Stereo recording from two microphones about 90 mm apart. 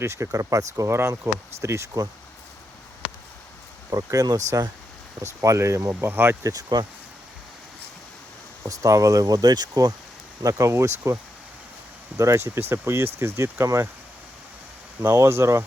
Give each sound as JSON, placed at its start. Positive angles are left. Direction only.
{"t": 0.0, "sound": "speech", "side_deg": -35}
{"t": 3.8, "sound": "speech", "side_deg": -40}
{"t": 5.4, "sound": "speech", "side_deg": -35}
{"t": 6.4, "sound": "speech", "side_deg": -40}
{"t": 8.6, "sound": "speech", "side_deg": -35}
{"t": 10.4, "sound": "speech", "side_deg": -35}
{"t": 15.0, "sound": "speech", "side_deg": -30}